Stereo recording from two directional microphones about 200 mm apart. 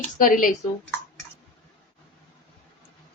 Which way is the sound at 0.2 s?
45° left (ahead or behind).